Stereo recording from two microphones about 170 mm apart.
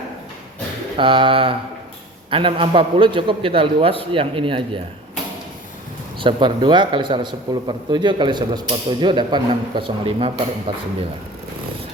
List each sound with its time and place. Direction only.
0.9 s a man's voice: 30° right (ahead or behind)
6.1 s a man's voice: 30° right (ahead or behind)